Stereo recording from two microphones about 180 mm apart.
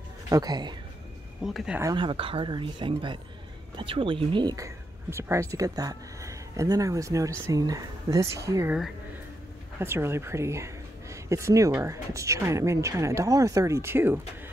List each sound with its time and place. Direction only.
0.3 s speech: 20° right (ahead or behind)
1.4 s speech: centre (ahead or behind)
1.8 s a woman's voice: 25° right (ahead or behind)
9.8 s a woman's voice: 15° right (ahead or behind)